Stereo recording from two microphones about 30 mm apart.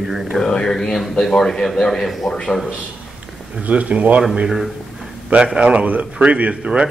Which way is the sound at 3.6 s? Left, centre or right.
Right.